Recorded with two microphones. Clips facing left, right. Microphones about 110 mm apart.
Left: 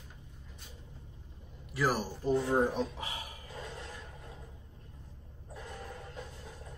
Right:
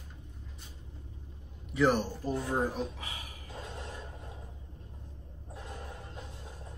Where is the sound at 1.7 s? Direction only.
5° left (ahead or behind).